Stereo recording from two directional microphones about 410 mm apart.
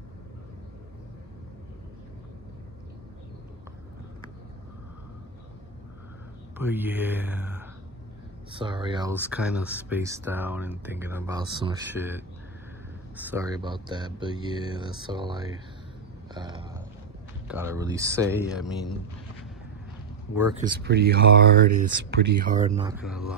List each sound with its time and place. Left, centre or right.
6.6 s a man's voice: centre
16.3 s a sound: centre
17.5 s speech: centre
20.3 s speech: centre
20.8 s speech: right; by 23.2 s centre